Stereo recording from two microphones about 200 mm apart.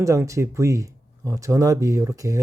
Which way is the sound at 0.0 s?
15° right (ahead or behind).